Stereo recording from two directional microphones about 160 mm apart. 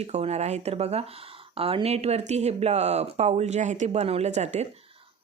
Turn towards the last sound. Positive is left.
turn(degrees=-45)  # may be behind; listen again after turning